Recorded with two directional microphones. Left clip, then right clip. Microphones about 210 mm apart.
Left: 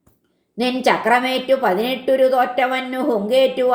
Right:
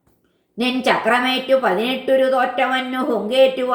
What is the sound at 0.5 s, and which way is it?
A woman's voice, 30° left (ahead or behind).